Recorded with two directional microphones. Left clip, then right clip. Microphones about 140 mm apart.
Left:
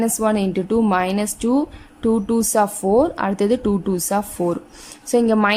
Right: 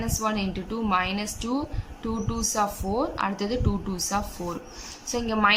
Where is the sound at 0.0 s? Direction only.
45° left (ahead or behind).